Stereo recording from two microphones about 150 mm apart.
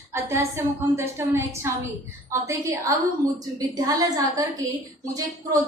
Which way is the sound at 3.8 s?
25° right (ahead or behind).